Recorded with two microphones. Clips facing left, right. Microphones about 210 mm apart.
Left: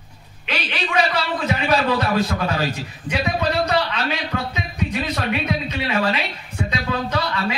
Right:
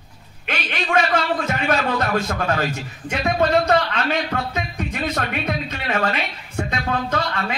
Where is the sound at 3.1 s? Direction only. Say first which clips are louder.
Right 3 dB; 50° right (ahead or behind).